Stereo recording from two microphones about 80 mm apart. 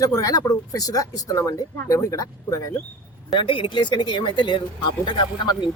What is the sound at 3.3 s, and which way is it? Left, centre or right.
Speech, left.